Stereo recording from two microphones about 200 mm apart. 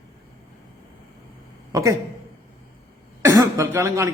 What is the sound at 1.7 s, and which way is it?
Speech, 15° right (ahead or behind).